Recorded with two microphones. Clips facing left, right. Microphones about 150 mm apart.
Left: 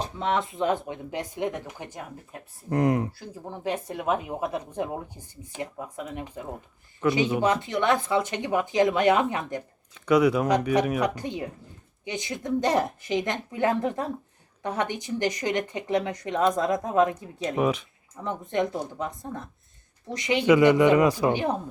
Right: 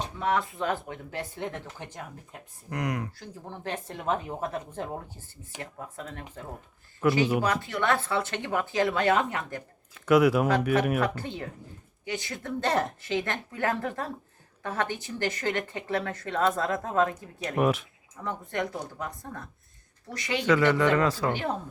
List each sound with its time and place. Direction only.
0.2 s speech: 20° left (ahead or behind)
2.6 s speech: 30° left (ahead or behind)
3.1 s speech: 10° left (ahead or behind)
7.0 s speech: centre (ahead or behind)
7.4 s speech: 20° left (ahead or behind)
9.9 s speech: 5° right (ahead or behind)
11.0 s speech: 15° left (ahead or behind)
17.5 s speech: 5° right (ahead or behind)
18.2 s speech: 20° left (ahead or behind)